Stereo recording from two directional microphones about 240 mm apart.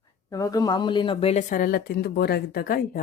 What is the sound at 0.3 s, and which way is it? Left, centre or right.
Speech, centre.